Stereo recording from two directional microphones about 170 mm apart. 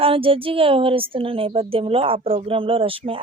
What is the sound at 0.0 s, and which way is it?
Speech, 30° right (ahead or behind).